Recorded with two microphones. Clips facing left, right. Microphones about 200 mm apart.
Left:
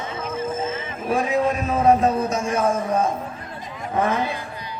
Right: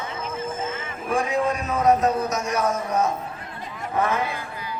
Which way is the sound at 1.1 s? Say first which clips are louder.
Left 2 dB; 20° left (ahead or behind).